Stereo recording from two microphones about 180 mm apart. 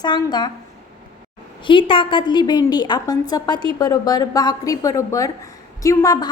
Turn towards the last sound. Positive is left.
turn(degrees=20)  # may be behind; listen again after turning